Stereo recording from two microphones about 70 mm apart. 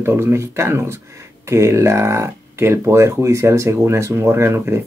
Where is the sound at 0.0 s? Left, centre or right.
Right.